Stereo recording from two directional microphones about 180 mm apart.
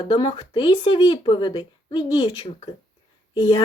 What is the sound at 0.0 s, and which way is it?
Speech, 30° left (ahead or behind).